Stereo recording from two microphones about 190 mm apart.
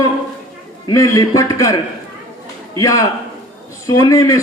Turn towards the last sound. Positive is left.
turn(degrees=15)  # may be behind; listen again after turning